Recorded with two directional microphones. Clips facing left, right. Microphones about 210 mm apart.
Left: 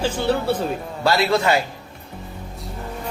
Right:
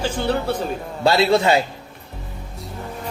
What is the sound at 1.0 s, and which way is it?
Speech, 25° right (ahead or behind).